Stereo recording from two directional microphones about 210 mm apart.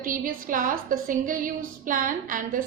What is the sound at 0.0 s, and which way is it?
A woman's voice, 40° right (ahead or behind).